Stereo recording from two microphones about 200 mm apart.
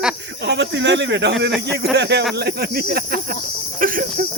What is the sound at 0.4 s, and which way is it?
Speech, 60° right (ahead or behind).